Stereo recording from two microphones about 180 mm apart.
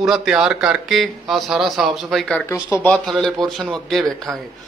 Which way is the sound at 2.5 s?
15° left (ahead or behind).